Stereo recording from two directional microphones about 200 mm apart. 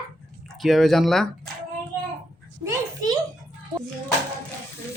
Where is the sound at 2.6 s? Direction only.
20° right (ahead or behind).